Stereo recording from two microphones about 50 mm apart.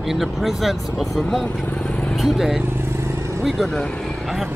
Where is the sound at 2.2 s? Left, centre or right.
Centre.